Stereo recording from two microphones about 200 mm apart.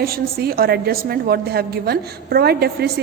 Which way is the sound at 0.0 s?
50° right (ahead or behind).